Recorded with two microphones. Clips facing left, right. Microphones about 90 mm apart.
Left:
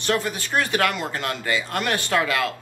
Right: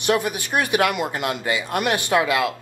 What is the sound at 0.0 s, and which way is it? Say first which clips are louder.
Speech: right 3 dB; 15° right (ahead or behind).